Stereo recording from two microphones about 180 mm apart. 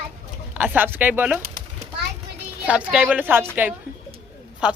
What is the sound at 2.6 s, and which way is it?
Speech, 5° right (ahead or behind).